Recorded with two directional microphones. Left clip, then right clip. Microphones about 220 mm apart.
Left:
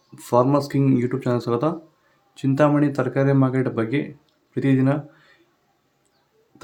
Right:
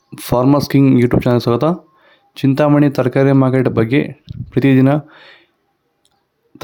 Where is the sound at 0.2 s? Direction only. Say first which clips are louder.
Right 4 dB; 40° right (ahead or behind).